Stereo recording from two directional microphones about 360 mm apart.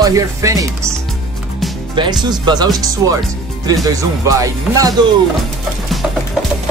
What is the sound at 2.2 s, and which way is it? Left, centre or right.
Speech, centre.